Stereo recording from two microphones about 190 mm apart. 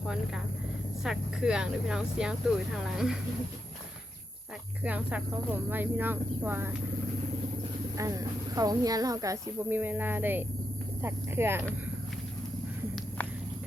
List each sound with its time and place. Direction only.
1.0 s speech: 5° right (ahead or behind)
4.8 s speech: 5° right (ahead or behind)
7.9 s speech: 15° right (ahead or behind)